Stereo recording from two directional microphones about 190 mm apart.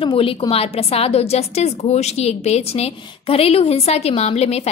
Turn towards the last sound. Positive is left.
turn(degrees=35)  # may be behind; listen again after turning